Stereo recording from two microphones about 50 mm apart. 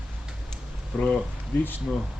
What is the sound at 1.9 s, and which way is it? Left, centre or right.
Speech, centre.